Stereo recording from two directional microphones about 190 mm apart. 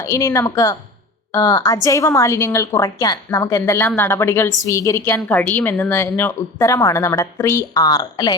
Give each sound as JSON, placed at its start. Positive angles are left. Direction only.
{"t": 0.0, "sound": "a woman's voice", "side_deg": 15}